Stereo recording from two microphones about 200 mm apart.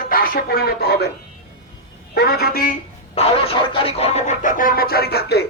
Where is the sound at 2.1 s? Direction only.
55° left (ahead or behind).